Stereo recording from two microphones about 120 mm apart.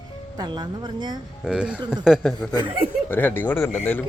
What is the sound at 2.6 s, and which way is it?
Speech, 50° right (ahead or behind).